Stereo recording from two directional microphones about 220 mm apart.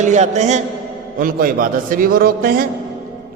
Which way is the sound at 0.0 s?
30° right (ahead or behind).